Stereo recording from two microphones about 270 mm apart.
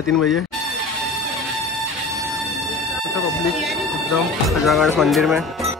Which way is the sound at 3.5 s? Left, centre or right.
Centre.